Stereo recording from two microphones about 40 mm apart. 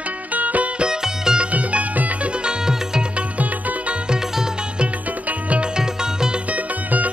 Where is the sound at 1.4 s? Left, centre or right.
Right.